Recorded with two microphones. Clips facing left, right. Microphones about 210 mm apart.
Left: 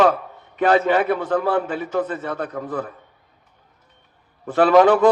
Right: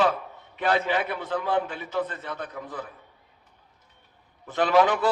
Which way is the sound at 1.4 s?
50° left (ahead or behind).